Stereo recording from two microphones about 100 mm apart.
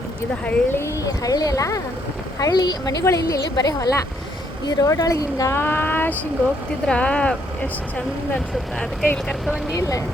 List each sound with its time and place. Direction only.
0.4 s a woman's voice: 25° left (ahead or behind)
9.1 s speech: 5° left (ahead or behind)
9.7 s a woman's voice: 35° left (ahead or behind)